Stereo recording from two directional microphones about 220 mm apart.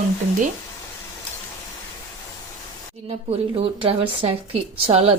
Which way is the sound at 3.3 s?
25° right (ahead or behind).